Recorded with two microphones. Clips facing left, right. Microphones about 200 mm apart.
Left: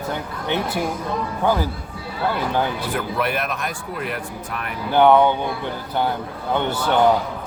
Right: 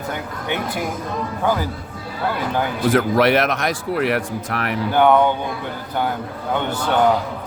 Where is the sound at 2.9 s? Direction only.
85° right.